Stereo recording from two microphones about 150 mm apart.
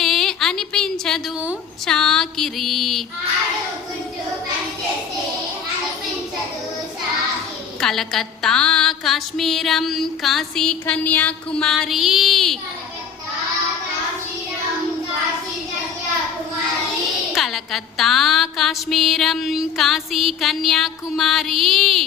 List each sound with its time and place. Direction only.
0.0 s a sound: centre (ahead or behind)
1.9 s music: 5° left (ahead or behind)
7.8 s music: 5° left (ahead or behind)
17.3 s music: centre (ahead or behind)